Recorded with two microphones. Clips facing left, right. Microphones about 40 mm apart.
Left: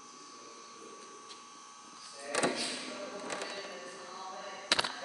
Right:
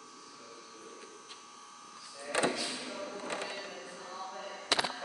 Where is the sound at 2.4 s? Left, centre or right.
Centre.